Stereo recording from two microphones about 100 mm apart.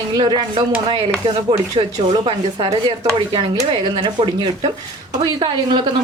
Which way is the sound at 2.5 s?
80° right.